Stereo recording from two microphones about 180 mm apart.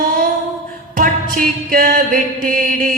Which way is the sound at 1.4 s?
50° right (ahead or behind).